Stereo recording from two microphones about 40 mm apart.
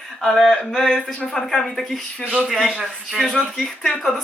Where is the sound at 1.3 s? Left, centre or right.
Centre.